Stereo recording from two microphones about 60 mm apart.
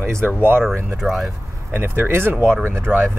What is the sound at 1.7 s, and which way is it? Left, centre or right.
Speech, right.